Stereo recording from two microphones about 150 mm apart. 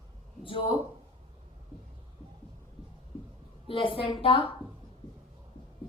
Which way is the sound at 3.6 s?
35° left (ahead or behind).